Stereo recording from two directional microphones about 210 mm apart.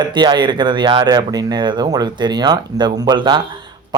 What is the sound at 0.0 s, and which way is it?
Speech, 20° right (ahead or behind).